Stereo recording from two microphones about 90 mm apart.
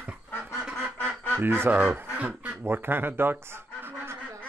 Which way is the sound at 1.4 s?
25° right (ahead or behind).